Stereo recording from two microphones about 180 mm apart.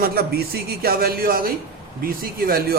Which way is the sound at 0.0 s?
55° right (ahead or behind).